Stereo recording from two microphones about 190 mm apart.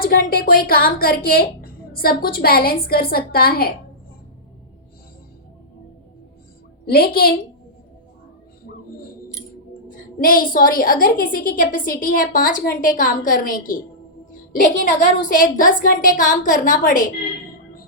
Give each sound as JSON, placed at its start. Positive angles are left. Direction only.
{"t": 0.0, "sound": "speech", "side_deg": 50}
{"t": 6.8, "sound": "speech", "side_deg": 55}
{"t": 9.9, "sound": "speech", "side_deg": 45}